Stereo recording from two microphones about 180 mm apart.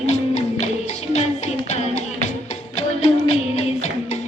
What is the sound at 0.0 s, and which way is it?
Music, 35° left (ahead or behind).